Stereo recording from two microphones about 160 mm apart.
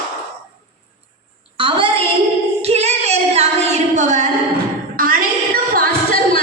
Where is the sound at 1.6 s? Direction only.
30° right (ahead or behind).